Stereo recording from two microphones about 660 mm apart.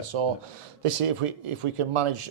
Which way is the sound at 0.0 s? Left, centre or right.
Right.